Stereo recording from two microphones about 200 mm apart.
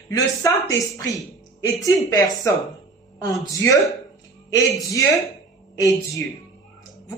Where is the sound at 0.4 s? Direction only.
15° left (ahead or behind).